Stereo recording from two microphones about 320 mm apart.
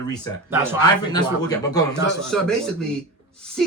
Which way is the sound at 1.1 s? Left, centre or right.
Centre.